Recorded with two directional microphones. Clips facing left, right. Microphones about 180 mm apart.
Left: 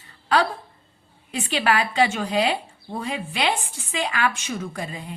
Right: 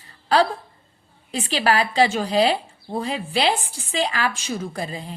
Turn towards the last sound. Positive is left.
turn(degrees=-30)  # may be behind; listen again after turning